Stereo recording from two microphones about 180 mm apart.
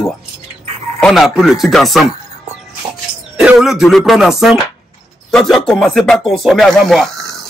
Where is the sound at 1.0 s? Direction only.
Centre (ahead or behind).